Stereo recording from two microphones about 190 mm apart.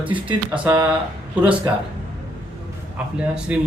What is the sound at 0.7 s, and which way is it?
Speech, 25° right (ahead or behind).